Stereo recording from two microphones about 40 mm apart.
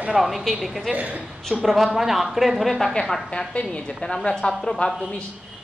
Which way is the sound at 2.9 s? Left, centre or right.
Centre.